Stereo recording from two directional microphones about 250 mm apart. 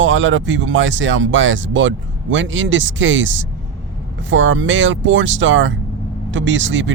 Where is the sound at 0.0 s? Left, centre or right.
Right.